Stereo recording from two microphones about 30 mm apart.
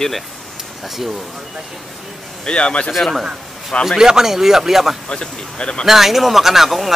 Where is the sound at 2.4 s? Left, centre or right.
Left.